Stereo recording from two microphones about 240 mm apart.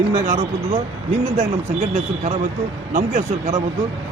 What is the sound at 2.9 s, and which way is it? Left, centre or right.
Speech, right.